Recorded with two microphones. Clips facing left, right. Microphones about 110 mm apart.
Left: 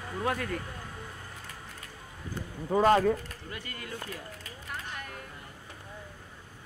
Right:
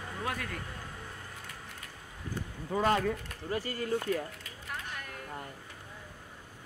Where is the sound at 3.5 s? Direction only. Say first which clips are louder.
Right 10 dB; 35° right (ahead or behind).